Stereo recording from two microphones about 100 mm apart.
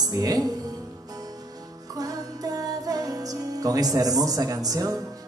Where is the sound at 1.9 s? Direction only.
35° right (ahead or behind).